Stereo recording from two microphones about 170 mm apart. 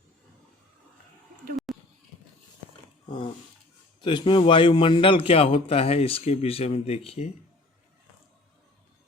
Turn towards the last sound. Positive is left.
turn(degrees=35)  # may be behind; listen again after turning